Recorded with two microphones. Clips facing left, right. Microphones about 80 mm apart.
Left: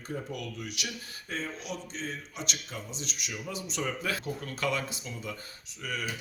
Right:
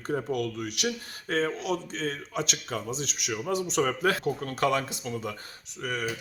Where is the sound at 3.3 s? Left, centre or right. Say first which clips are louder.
Right 11 dB; right.